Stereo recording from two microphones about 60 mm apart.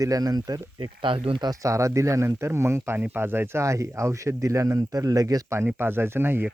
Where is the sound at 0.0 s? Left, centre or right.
Right.